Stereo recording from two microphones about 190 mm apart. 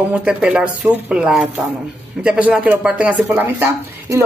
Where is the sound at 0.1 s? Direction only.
5° right (ahead or behind).